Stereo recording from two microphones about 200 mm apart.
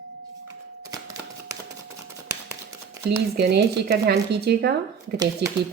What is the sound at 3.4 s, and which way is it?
A woman's voice, 55° right (ahead or behind).